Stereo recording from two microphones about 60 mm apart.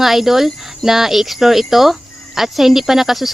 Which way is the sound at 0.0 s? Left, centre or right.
Centre.